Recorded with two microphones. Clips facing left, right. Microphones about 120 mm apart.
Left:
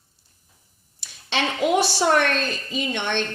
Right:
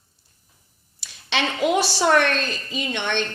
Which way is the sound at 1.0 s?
50° left (ahead or behind).